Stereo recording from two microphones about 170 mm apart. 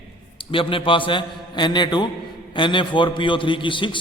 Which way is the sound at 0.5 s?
30° left (ahead or behind).